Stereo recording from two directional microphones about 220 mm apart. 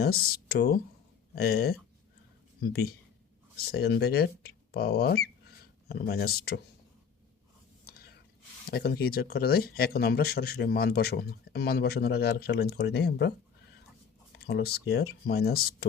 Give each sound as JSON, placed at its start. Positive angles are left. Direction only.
{"t": 0.0, "sound": "speech", "side_deg": 45}
{"t": 8.7, "sound": "speech", "side_deg": 45}
{"t": 14.3, "sound": "speech", "side_deg": 45}